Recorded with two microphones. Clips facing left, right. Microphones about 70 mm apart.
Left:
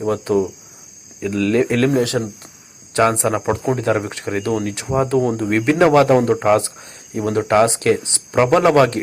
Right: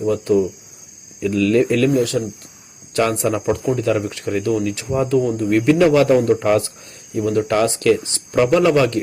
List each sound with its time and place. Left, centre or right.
0.0 s speech: left
1.2 s speech: left
2.9 s speech: left